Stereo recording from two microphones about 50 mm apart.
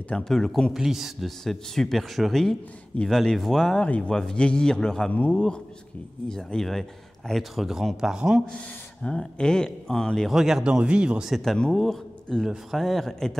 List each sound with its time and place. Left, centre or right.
0.1 s a man's voice: centre
0.7 s speech: centre
1.4 s speech: centre
3.8 s a man's voice: left
4.1 s a man's voice: centre
5.1 s a man's voice: left; by 8.2 s centre
9.0 s a man's voice: centre
10.3 s speech: centre
10.6 s speech: centre
11.2 s a man's voice: centre